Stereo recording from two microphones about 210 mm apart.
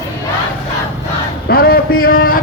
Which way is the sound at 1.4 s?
45° left (ahead or behind).